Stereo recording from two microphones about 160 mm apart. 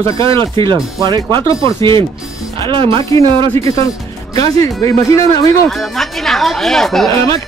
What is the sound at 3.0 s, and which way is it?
Speech, 20° left (ahead or behind).